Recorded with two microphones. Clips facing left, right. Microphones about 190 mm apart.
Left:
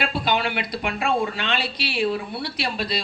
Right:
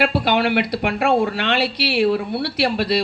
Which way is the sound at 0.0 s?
65° right (ahead or behind).